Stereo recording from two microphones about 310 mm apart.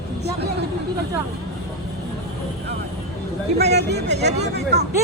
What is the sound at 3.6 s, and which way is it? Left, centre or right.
Speech, right.